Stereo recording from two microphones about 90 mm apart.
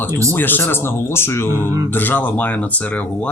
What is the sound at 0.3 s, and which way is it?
Speech, 20° left (ahead or behind).